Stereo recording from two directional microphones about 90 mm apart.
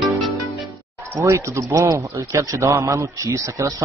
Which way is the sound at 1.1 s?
30° right (ahead or behind).